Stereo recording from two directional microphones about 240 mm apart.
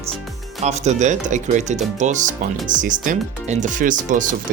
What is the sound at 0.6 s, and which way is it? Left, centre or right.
Speech, right.